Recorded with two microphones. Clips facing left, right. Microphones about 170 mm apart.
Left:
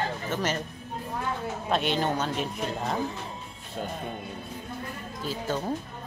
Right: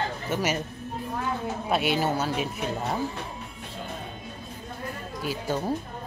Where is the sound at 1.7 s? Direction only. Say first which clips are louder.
Right 1 dB; 10° right (ahead or behind).